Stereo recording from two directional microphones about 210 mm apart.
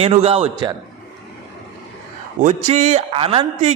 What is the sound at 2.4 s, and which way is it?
Speech, 35° right (ahead or behind).